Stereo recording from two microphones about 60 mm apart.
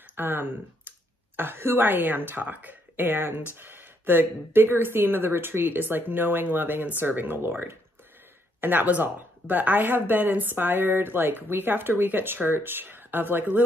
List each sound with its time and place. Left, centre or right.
0.1 s speech: right